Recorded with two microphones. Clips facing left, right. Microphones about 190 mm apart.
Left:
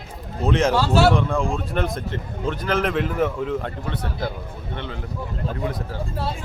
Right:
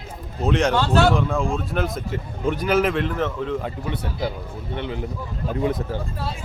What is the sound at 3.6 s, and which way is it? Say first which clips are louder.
A man's voice: right 1 dB; 10° right (ahead or behind).